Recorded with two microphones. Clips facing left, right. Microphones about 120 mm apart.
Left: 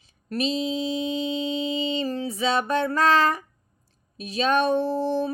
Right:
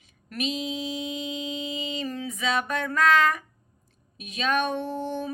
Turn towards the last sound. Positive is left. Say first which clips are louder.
# left 6 dB
turn(degrees=35)  # may be behind; listen again after turning